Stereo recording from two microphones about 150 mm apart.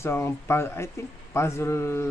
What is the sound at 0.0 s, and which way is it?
Speech, 15° left (ahead or behind).